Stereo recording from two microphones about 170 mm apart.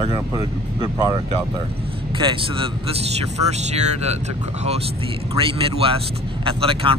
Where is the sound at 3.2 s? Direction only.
40° right (ahead or behind).